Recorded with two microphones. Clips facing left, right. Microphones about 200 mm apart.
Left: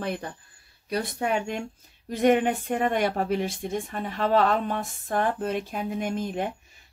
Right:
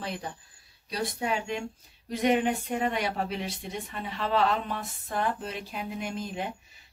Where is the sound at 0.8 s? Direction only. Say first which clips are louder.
Left 3 dB; 55° left (ahead or behind).